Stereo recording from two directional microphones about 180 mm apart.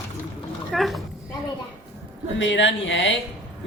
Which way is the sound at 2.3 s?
90° left.